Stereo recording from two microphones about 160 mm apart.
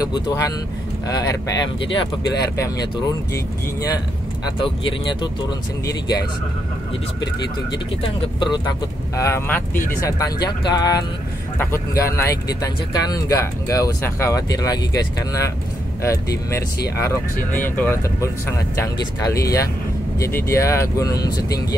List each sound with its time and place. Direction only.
0.0 s speech: 20° left (ahead or behind)
4.6 s speech: 30° left (ahead or behind)
8.4 s speech: 25° left (ahead or behind)